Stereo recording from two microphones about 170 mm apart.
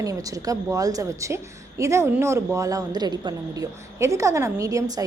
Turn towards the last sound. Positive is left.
turn(degrees=-20)  # may be behind; listen again after turning